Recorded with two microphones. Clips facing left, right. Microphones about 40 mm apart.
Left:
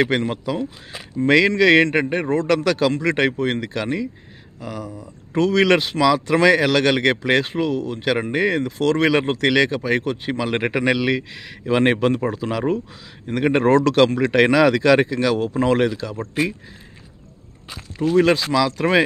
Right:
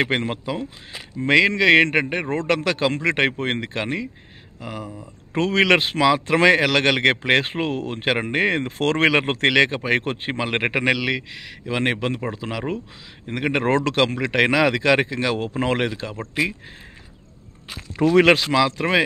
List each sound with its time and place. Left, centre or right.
0.0 s speech: right
0.6 s speech: centre; by 8.1 s right
8.1 s speech: right
9.6 s speech: right
11.1 s speech: centre; by 16.5 s right
17.9 s speech: right
18.5 s speech: right